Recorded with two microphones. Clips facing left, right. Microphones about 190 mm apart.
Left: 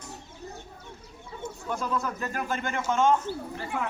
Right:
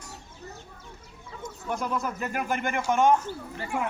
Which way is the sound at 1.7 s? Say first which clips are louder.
Right 1 dB; 15° right (ahead or behind).